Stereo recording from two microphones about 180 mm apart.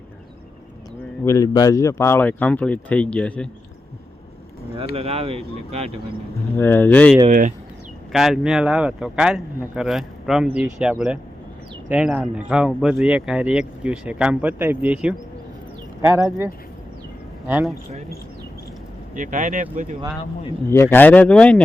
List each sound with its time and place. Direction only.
1.2 s speech: 20° left (ahead or behind)
4.9 s speech: 35° right (ahead or behind)
6.6 s speech: 10° left (ahead or behind)
7.3 s speech: 45° right (ahead or behind)
8.1 s speech: centre (ahead or behind)
17.5 s speech: centre (ahead or behind)
19.1 s speech: 45° right (ahead or behind)
20.7 s speech: 15° left (ahead or behind)